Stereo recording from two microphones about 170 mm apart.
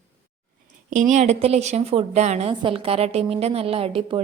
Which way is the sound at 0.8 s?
45° right (ahead or behind).